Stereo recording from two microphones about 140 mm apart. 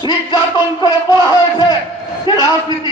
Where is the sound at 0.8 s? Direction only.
30° left (ahead or behind).